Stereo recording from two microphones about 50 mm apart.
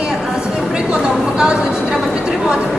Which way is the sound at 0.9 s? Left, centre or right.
Centre.